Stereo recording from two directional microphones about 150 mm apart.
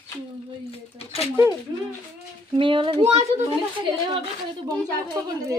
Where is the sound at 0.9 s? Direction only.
40° left (ahead or behind).